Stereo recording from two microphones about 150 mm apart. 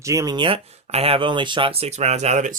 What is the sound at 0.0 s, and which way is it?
Speech, 20° right (ahead or behind).